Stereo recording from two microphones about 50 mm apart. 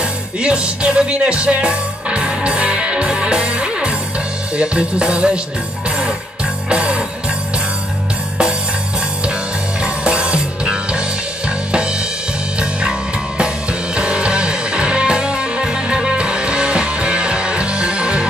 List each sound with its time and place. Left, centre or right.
0.4 s speech: centre
5.9 s music: centre
9.8 s music: right
13.4 s music: centre